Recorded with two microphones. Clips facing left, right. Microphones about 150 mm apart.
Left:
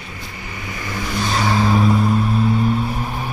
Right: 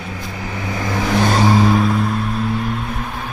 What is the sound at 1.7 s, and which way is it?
Music, 5° left (ahead or behind).